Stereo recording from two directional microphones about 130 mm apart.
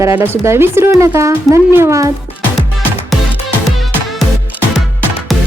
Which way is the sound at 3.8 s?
Centre (ahead or behind).